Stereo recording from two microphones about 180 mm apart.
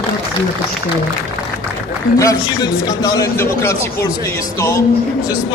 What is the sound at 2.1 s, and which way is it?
A man's voice, 20° left (ahead or behind).